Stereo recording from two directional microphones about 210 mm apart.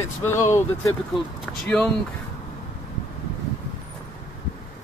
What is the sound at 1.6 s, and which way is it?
Speech, 5° left (ahead or behind).